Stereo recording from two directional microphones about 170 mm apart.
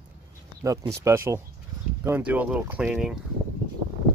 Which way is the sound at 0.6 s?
20° right (ahead or behind).